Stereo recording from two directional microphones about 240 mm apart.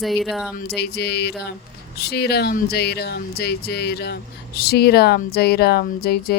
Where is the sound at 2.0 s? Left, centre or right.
Left.